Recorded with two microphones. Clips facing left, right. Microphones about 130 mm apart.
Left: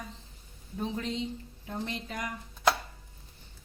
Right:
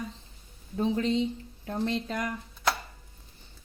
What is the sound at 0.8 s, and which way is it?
Speech, 70° right (ahead or behind).